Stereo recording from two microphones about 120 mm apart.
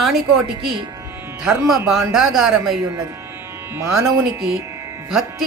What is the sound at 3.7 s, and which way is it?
Speech, 25° right (ahead or behind).